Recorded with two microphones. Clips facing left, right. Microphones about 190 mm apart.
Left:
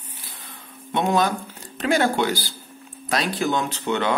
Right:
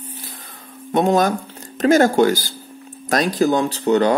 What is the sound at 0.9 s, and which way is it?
Speech, 45° right (ahead or behind).